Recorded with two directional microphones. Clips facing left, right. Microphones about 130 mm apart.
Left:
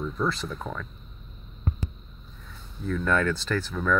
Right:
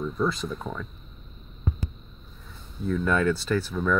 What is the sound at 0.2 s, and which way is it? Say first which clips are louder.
Speech: right 2 dB; 10° right (ahead or behind).